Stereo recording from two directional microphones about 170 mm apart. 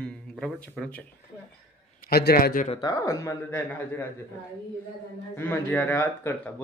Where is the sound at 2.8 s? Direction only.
20° left (ahead or behind).